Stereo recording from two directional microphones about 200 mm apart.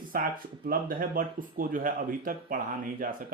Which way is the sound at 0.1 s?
45° right (ahead or behind).